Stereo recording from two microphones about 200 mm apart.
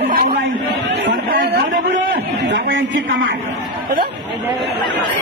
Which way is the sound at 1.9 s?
70° right (ahead or behind).